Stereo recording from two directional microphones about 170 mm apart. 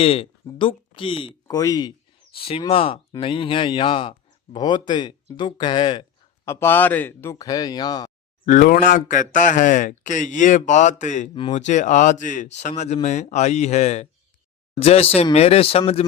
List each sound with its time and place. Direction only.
0.0 s speech: 35° left (ahead or behind)
2.3 s speech: 30° left (ahead or behind)
6.4 s speech: 15° left (ahead or behind)
8.4 s speech: 50° left (ahead or behind)